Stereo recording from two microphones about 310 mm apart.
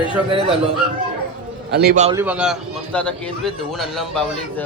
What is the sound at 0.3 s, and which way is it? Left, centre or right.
Speech, centre.